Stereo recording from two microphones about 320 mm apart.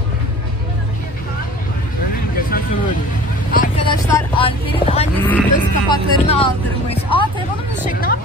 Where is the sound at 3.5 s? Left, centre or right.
Left.